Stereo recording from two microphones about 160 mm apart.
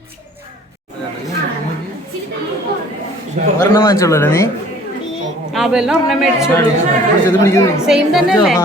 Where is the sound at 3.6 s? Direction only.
20° left (ahead or behind).